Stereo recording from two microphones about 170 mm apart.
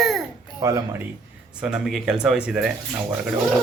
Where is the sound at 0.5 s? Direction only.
20° right (ahead or behind).